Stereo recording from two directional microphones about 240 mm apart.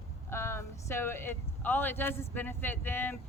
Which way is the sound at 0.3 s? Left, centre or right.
Centre.